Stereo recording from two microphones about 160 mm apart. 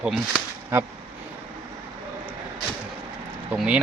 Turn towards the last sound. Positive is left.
turn(degrees=-10)  # may be behind; listen again after turning